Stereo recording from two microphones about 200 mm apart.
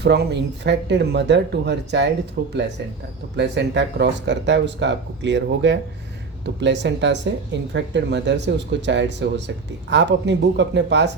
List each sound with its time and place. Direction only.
0.0 s speech: 55° right (ahead or behind)